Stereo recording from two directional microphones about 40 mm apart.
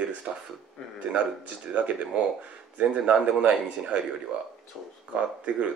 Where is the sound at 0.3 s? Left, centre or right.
Right.